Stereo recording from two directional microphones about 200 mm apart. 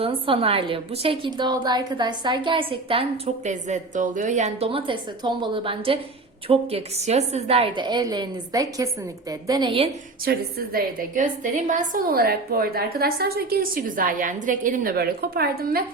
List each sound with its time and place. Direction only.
0.0 s a woman's voice: 25° right (ahead or behind)
10.2 s a woman's voice: 50° right (ahead or behind)